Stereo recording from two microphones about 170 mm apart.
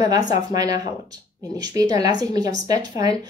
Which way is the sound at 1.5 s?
20° right (ahead or behind).